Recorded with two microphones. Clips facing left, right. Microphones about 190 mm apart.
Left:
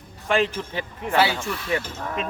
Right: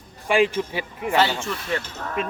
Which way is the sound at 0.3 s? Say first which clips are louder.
Right 3 dB; 10° right (ahead or behind).